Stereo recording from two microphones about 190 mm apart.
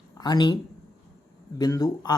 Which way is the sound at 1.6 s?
20° left (ahead or behind).